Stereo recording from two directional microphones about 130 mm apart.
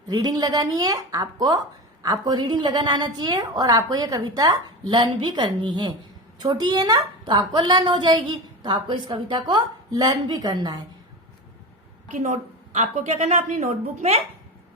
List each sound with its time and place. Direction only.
0.1 s a woman's voice: 35° right (ahead or behind)
4.9 s a woman's voice: 40° right (ahead or behind)
12.2 s a woman's voice: 65° right (ahead or behind)